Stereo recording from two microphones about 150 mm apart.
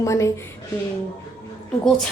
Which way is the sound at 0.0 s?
20° left (ahead or behind).